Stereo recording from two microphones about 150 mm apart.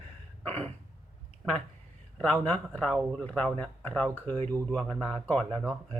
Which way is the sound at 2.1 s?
5° left (ahead or behind).